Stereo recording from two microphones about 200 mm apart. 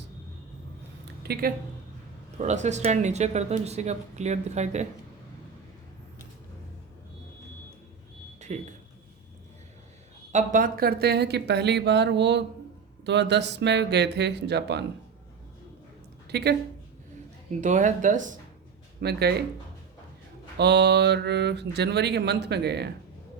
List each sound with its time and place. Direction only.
1.2 s speech: 50° right (ahead or behind)
2.4 s speech: 35° right (ahead or behind)
8.5 s speech: 35° right (ahead or behind)
10.3 s speech: 40° right (ahead or behind); by 14.8 s 60° right (ahead or behind)
16.3 s speech: 55° right (ahead or behind)
17.6 s speech: 40° right (ahead or behind)
18.9 s speech: 55° right (ahead or behind)
20.6 s speech: 55° right (ahead or behind)